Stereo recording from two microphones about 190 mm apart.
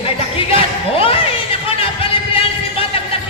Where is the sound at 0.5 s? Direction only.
30° left (ahead or behind).